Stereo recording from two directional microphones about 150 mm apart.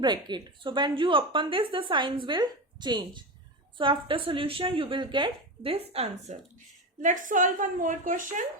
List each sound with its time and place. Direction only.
0.0 s a woman's voice: 30° right (ahead or behind)
7.0 s a woman's voice: 60° right (ahead or behind)